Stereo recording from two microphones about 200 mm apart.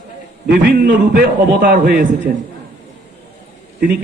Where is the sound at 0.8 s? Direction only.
45° right (ahead or behind).